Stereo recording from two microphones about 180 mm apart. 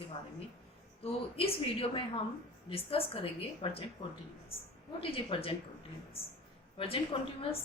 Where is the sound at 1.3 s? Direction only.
30° left (ahead or behind).